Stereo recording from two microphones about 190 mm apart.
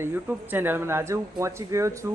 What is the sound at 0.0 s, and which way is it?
Speech, 10° right (ahead or behind).